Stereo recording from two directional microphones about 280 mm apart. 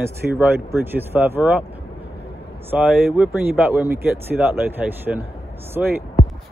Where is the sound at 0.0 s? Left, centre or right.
Centre.